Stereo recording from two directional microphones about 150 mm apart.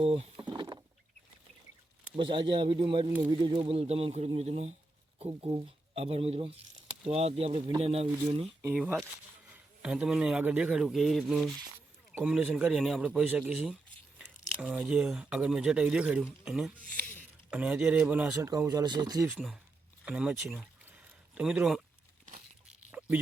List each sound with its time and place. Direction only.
0.0 s speech: 40° right (ahead or behind)
0.4 s rowboat: 30° right (ahead or behind)
2.1 s speech: 35° right (ahead or behind)
5.2 s speech: 35° right (ahead or behind)
8.7 s speech: 5° right (ahead or behind); by 19.3 s 25° right (ahead or behind)
19.3 s speech: centre (ahead or behind)
20.8 s a sound: 5° right (ahead or behind)
22.3 s a sound: 55° right (ahead or behind)
22.9 s a sound: 10° right (ahead or behind)